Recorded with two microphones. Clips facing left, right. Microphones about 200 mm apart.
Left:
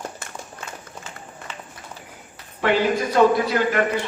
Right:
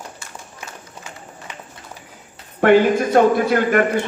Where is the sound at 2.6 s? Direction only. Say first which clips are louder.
Right 7 dB; 55° right (ahead or behind).